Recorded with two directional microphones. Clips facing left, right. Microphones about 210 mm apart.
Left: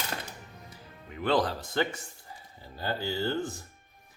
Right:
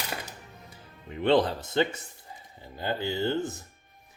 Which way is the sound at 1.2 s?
25° right (ahead or behind).